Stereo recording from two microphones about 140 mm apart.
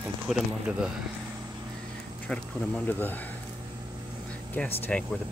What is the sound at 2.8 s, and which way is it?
Speech, 15° left (ahead or behind).